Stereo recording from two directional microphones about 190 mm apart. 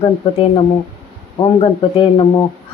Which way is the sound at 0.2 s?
30° left (ahead or behind).